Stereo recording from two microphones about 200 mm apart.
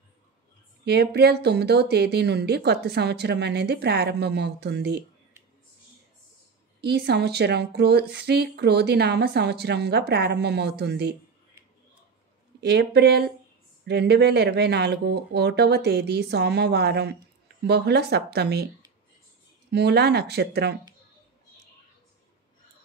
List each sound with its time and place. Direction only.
0.8 s speech: 55° right (ahead or behind)
6.8 s speech: 55° right (ahead or behind)
12.5 s speech: 55° right (ahead or behind)
19.7 s speech: 55° right (ahead or behind)